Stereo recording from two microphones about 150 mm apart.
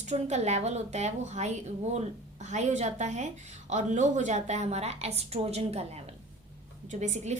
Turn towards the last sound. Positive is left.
turn(degrees=-50)  # may be behind; listen again after turning